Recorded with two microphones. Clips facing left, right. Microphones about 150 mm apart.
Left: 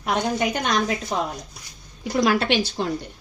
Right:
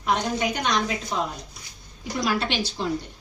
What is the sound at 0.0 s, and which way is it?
Speech, 60° left (ahead or behind).